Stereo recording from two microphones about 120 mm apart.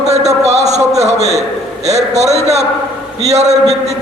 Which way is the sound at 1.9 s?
65° right (ahead or behind).